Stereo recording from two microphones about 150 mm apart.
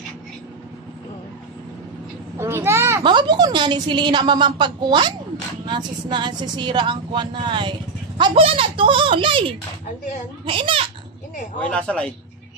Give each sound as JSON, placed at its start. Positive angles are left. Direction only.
{"t": 2.3, "sound": "a sound", "side_deg": -15}
{"t": 3.0, "sound": "a woman's voice", "side_deg": -30}
{"t": 11.6, "sound": "speech", "side_deg": 10}